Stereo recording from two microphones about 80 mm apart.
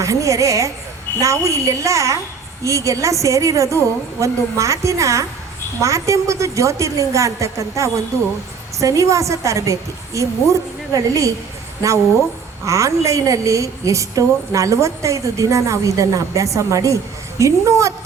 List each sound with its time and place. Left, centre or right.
0.0 s a woman's voice: right
12.6 s a woman's voice: right